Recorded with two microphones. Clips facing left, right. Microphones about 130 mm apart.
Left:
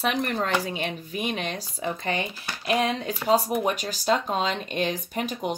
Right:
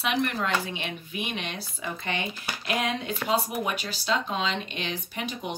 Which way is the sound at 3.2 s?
40° left (ahead or behind).